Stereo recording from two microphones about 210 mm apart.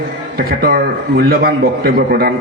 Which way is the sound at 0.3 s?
45° right (ahead or behind).